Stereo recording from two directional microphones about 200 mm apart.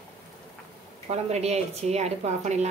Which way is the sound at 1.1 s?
35° right (ahead or behind).